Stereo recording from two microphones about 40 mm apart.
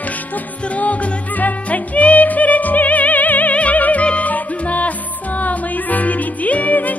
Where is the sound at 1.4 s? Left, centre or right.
Left.